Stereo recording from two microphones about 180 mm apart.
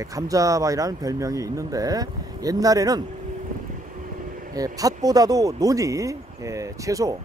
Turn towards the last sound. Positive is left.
turn(degrees=-20)  # may be behind; listen again after turning